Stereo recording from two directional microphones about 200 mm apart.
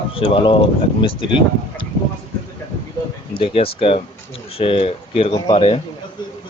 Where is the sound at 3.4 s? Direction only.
25° left (ahead or behind).